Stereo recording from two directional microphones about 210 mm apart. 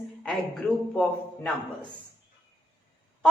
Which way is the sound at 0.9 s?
5° left (ahead or behind).